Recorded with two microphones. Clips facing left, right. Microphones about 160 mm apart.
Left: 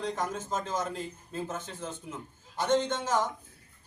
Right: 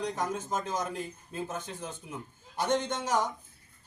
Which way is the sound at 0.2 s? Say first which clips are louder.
Even; 15° right (ahead or behind).